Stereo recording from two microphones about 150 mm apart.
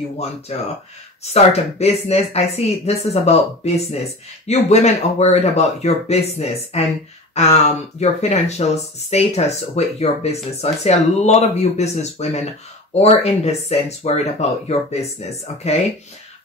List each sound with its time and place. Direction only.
1.2 s speech: 45° left (ahead or behind)